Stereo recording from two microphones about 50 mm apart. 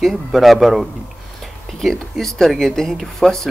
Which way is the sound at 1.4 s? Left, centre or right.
Centre.